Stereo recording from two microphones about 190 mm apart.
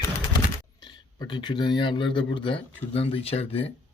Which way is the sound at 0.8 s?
25° left (ahead or behind).